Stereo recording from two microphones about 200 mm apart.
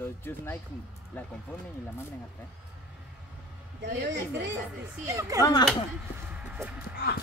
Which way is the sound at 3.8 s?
60° right (ahead or behind).